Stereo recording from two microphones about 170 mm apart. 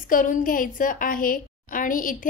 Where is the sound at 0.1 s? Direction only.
50° left (ahead or behind).